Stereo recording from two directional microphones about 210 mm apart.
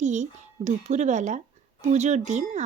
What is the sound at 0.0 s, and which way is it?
Speech, 35° right (ahead or behind).